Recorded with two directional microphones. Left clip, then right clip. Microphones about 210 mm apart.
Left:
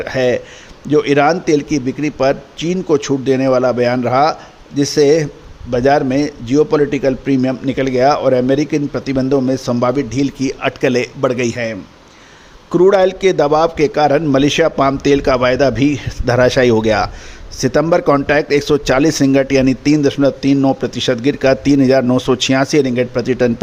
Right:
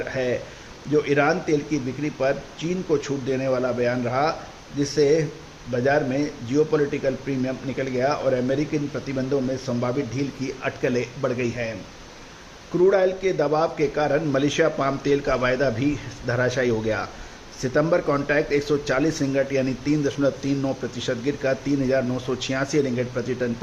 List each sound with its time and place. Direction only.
0.0 s a man's voice: 55° left (ahead or behind)
12.7 s a man's voice: 55° left (ahead or behind)